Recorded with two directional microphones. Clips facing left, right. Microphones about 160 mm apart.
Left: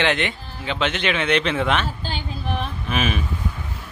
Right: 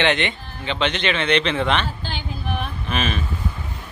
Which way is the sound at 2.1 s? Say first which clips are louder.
Left 1 dB; centre (ahead or behind).